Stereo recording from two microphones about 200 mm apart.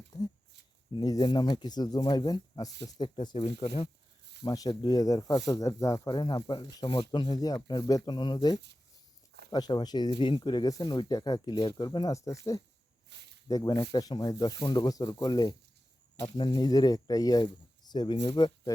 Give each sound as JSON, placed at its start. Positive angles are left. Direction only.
{"t": 0.1, "sound": "a sound", "side_deg": 20}
{"t": 0.9, "sound": "speech", "side_deg": 20}
{"t": 13.1, "sound": "speech", "side_deg": -60}
{"t": 13.5, "sound": "speech", "side_deg": 20}